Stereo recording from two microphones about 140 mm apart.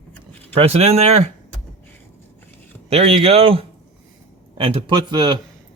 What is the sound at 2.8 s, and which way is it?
A man's voice, 45° right (ahead or behind).